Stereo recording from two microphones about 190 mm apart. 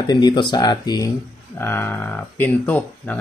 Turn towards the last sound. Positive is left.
turn(degrees=10)  # may be behind; listen again after turning